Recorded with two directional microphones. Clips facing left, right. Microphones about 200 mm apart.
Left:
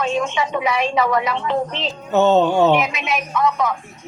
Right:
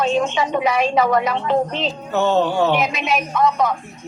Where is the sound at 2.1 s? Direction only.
20° left (ahead or behind).